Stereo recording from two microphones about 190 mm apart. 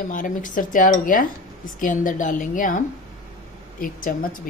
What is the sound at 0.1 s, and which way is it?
A woman's voice, 45° left (ahead or behind).